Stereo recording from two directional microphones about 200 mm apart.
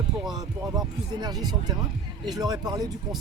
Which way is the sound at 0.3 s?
20° right (ahead or behind).